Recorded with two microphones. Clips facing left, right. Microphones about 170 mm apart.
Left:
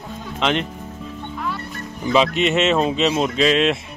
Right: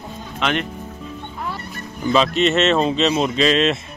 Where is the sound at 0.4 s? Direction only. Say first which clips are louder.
Left 1 dB; 25° left (ahead or behind).